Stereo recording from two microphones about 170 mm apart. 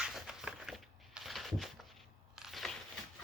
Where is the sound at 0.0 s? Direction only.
5° right (ahead or behind).